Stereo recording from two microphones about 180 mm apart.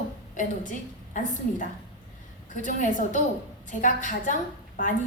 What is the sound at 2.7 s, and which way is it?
A woman's voice, 45° left (ahead or behind).